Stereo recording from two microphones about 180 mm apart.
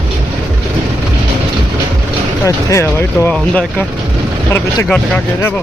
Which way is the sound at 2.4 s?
20° left (ahead or behind).